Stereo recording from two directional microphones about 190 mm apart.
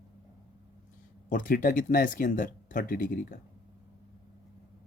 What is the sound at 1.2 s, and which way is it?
Speech, 45° left (ahead or behind).